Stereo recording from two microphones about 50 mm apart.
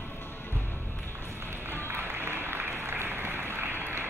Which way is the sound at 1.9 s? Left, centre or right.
Right.